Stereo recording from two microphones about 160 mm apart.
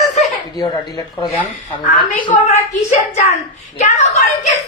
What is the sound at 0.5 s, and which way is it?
Speech, 25° left (ahead or behind).